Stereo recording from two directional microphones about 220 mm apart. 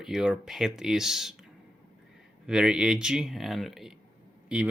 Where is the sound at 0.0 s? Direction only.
5° right (ahead or behind).